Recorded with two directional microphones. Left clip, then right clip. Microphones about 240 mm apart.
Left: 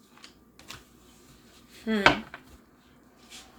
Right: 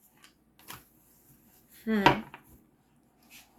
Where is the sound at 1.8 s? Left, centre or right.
Centre.